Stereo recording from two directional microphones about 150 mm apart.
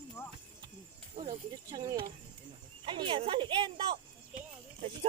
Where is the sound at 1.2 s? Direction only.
30° right (ahead or behind).